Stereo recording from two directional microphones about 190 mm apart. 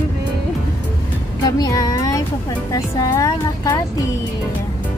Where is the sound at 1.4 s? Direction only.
20° left (ahead or behind).